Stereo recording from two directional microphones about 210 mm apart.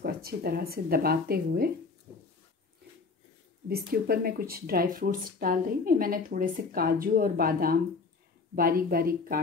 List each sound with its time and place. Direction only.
0.0 s speech: 45° right (ahead or behind)
3.6 s speech: 45° right (ahead or behind)